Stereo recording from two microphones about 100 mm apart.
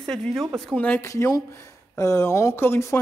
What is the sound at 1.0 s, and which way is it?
Speech, 30° left (ahead or behind).